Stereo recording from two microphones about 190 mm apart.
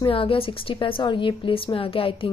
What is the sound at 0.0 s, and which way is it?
Speech, 30° left (ahead or behind).